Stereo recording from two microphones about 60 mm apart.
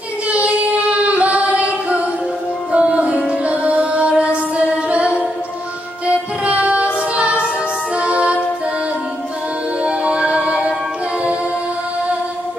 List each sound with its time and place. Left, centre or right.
0.3 s child singing: right
2.7 s music: centre
9.8 s music: centre